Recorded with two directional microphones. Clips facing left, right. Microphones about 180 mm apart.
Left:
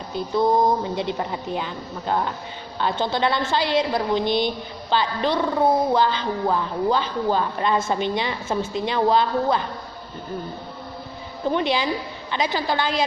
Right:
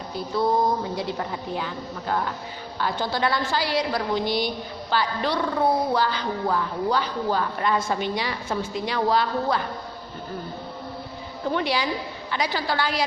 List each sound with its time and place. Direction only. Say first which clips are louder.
0.1 s a woman's voice: left 3 dB; 20° left (ahead or behind)
11.4 s a woman's voice: left 3 dB; 20° left (ahead or behind)